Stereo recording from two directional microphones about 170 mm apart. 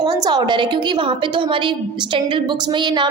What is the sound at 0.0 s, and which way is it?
A woman's voice, 25° right (ahead or behind).